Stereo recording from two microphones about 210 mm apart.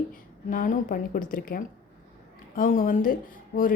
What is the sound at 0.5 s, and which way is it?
A woman's voice, 40° left (ahead or behind).